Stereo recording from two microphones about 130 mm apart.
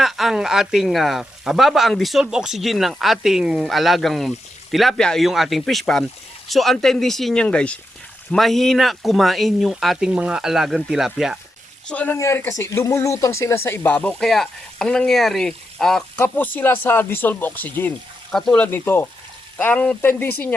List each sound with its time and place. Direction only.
0.0 s speech: centre (ahead or behind)
11.9 s speech: 10° left (ahead or behind)
12.1 s speech: 20° left (ahead or behind)